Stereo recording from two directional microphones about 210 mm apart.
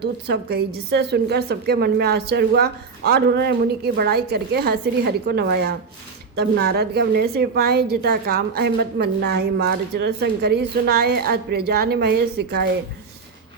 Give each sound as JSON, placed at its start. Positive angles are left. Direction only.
{"t": 0.0, "sound": "a woman's voice", "side_deg": -50}